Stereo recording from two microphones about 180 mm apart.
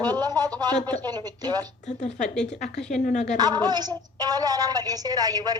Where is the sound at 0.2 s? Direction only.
20° right (ahead or behind).